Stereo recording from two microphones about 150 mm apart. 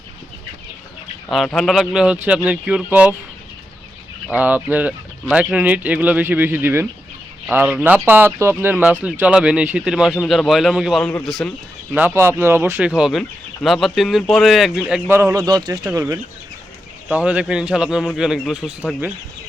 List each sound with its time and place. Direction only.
1.5 s speech: centre (ahead or behind)
4.3 s speech: 10° right (ahead or behind)
11.9 s speech: 15° right (ahead or behind)
13.0 s speech: centre (ahead or behind)
15.1 s speech: 15° right (ahead or behind)